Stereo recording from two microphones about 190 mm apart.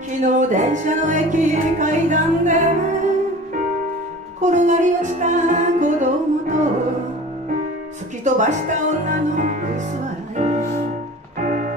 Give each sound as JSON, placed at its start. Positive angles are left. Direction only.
{"t": 0.2, "sound": "music", "side_deg": -40}
{"t": 4.4, "sound": "music", "side_deg": -40}
{"t": 8.2, "sound": "music", "side_deg": -40}